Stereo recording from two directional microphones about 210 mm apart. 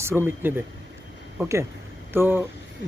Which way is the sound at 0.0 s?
10° right (ahead or behind).